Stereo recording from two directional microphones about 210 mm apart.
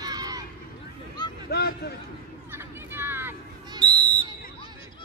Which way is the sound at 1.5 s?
50° left (ahead or behind).